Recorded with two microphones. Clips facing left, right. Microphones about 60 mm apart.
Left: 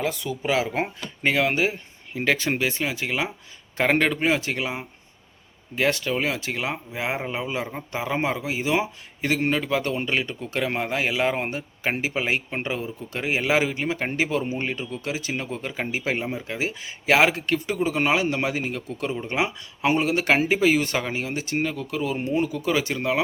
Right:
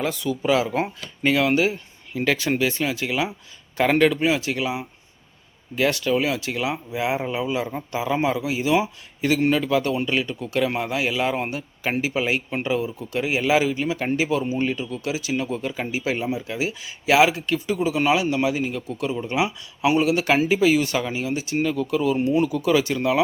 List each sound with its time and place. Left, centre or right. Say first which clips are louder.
0.0 s speech: right 3 dB; centre; by 21.6 s left
21.6 s speech: right 8 dB; left